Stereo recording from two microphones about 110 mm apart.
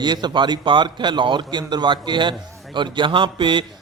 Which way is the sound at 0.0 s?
40° right (ahead or behind).